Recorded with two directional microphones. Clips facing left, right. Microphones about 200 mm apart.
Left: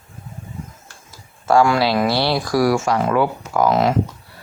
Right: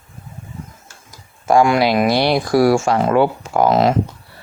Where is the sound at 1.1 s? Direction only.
15° right (ahead or behind).